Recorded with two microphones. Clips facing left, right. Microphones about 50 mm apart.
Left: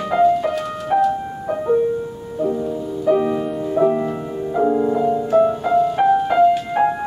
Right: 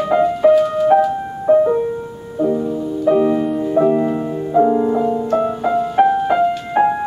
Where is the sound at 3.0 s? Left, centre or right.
Centre.